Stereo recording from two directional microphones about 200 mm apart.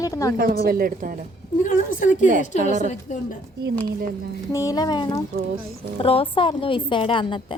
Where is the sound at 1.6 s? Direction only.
40° left (ahead or behind).